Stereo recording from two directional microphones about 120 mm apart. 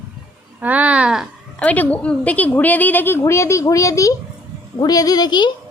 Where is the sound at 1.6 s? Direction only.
10° left (ahead or behind); by 5.5 s 40° left (ahead or behind).